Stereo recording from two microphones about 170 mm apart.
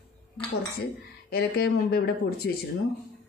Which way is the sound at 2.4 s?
80° left.